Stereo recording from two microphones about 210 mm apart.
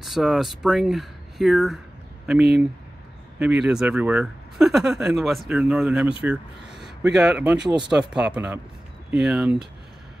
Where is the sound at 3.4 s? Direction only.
5° right (ahead or behind).